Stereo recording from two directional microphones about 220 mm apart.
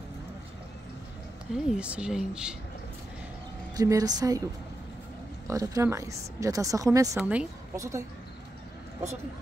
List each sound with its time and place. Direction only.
1.5 s speech: 5° right (ahead or behind)
3.7 s speech: 15° right (ahead or behind)
5.5 s speech: 15° right (ahead or behind)